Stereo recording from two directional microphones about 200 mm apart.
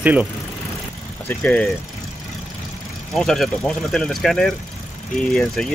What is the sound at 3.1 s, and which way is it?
Speech, centre (ahead or behind).